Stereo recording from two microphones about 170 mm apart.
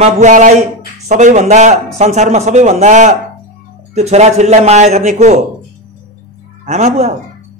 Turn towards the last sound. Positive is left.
turn(degrees=-40)  # may be behind; listen again after turning